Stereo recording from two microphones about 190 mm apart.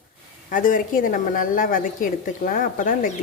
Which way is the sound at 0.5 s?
45° left (ahead or behind).